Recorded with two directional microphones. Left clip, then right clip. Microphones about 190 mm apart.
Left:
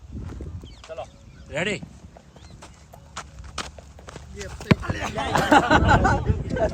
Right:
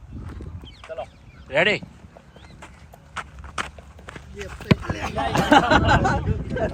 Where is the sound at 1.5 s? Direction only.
5° left (ahead or behind).